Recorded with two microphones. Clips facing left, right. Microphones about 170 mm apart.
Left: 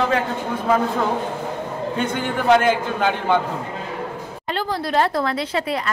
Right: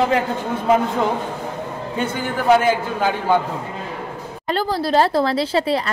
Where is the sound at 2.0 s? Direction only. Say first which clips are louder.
Right 1 dB; 5° right (ahead or behind).